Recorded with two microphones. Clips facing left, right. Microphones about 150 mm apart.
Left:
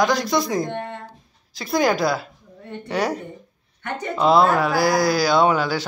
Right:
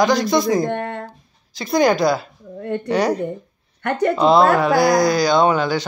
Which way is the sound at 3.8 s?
60° right (ahead or behind).